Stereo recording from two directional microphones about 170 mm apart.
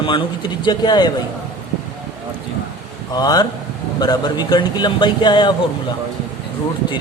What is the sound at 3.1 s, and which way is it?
Speech, 20° left (ahead or behind).